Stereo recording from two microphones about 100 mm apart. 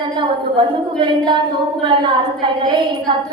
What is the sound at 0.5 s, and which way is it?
Speech, 50° right (ahead or behind).